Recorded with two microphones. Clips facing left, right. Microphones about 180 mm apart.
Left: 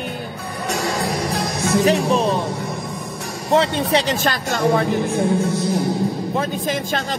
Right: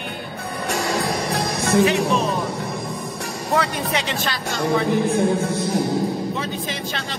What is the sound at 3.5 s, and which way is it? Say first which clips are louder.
Speech: left 5 dB; 25° left (ahead or behind).